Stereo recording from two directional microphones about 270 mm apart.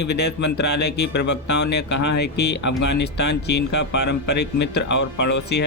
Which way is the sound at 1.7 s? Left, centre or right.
Left.